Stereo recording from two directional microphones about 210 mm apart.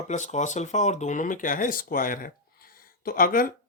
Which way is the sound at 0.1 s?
35° left (ahead or behind).